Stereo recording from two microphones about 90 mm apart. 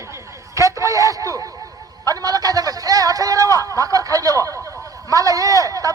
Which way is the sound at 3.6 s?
40° right (ahead or behind).